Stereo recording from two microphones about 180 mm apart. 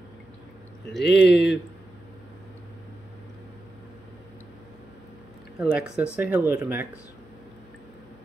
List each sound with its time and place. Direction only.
0.9 s speech: 75° left (ahead or behind)
5.6 s speech: 5° right (ahead or behind)